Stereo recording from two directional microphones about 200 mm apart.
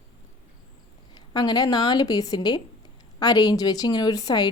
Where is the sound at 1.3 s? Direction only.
20° left (ahead or behind).